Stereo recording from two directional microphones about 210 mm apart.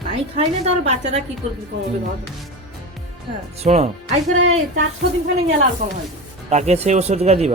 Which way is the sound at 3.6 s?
30° right (ahead or behind).